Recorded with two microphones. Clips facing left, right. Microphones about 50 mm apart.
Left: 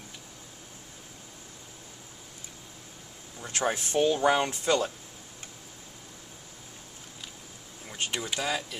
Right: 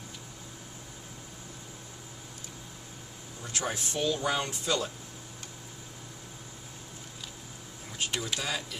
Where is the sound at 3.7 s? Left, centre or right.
Left.